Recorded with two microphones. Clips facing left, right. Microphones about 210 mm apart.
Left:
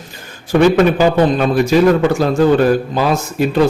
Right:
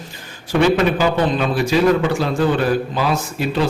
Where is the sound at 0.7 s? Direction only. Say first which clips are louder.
Left 5 dB; 45° left (ahead or behind).